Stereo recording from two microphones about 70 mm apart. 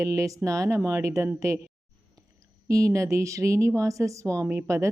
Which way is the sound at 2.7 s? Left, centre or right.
Right.